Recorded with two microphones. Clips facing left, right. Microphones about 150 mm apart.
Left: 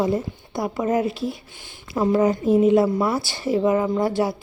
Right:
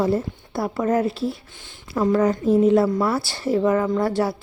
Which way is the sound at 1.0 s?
30° right (ahead or behind).